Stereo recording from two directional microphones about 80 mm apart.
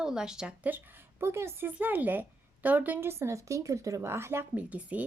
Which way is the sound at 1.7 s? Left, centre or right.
Right.